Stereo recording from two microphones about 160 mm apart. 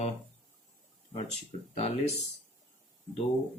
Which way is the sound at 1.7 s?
40° left (ahead or behind).